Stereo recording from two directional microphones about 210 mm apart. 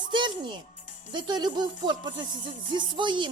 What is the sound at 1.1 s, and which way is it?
A woman's voice, 20° right (ahead or behind).